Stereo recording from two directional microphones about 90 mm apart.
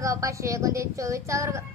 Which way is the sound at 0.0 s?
35° right (ahead or behind).